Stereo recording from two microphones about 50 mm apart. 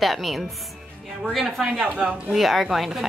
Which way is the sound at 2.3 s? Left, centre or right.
Centre.